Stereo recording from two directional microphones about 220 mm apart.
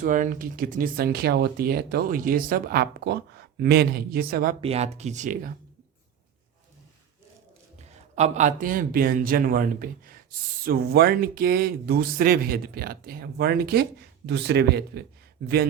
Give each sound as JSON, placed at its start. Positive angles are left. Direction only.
{"t": 0.0, "sound": "speech", "side_deg": -35}
{"t": 4.6, "sound": "speech", "side_deg": -30}
{"t": 7.8, "sound": "a man's voice", "side_deg": -30}